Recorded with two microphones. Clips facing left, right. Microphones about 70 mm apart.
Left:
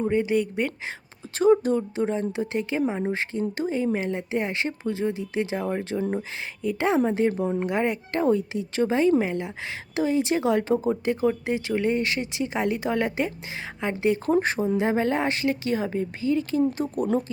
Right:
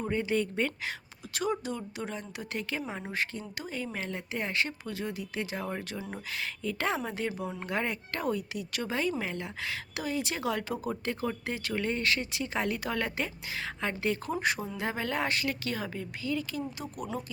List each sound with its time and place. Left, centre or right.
0.1 s speech: left
1.4 s speech: left
14.3 s speech: left